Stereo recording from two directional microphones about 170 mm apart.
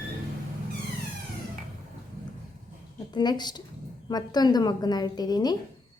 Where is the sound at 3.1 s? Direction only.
25° left (ahead or behind).